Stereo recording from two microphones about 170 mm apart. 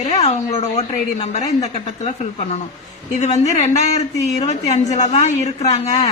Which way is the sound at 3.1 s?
40° left (ahead or behind).